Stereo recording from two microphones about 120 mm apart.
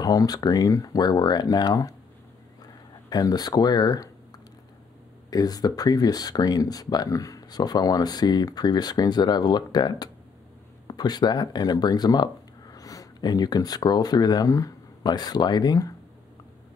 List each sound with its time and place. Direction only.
0.0 s speech: 30° left (ahead or behind)
5.3 s speech: 30° left (ahead or behind)